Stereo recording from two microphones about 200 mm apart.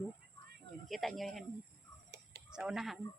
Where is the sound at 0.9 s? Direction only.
Centre (ahead or behind).